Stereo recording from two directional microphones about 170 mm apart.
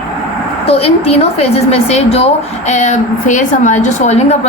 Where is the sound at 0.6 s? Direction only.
35° left (ahead or behind).